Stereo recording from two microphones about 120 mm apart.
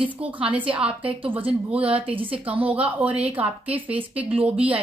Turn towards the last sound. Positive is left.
turn(degrees=-10)  # may be behind; listen again after turning